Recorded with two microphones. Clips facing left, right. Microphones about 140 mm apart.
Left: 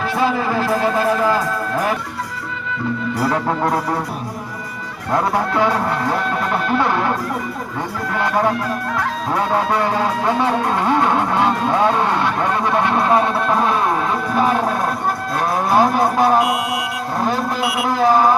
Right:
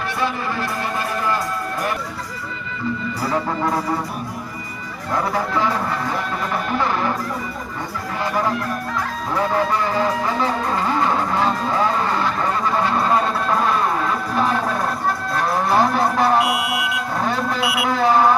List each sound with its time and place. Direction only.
5.5 s music: 65° left (ahead or behind)
9.7 s music: 65° left (ahead or behind)
12.6 s speech: 65° left (ahead or behind)
15.7 s speech: 5° left (ahead or behind)
16.4 s speech: 5° right (ahead or behind)
17.8 s speech: 5° left (ahead or behind)